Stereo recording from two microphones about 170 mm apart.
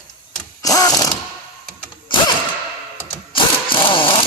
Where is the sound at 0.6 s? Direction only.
20° left (ahead or behind).